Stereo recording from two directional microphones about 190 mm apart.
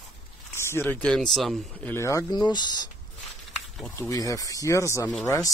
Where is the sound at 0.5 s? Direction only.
15° left (ahead or behind).